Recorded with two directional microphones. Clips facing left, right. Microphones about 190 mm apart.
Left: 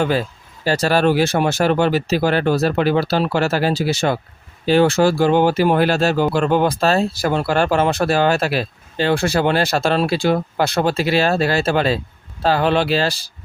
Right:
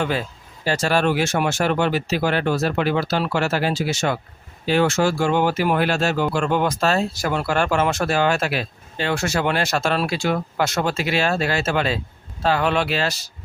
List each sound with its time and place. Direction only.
0.0 s speech: 35° left (ahead or behind)